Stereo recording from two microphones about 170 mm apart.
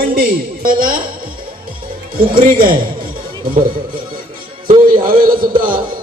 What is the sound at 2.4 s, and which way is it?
Speech, 55° right (ahead or behind).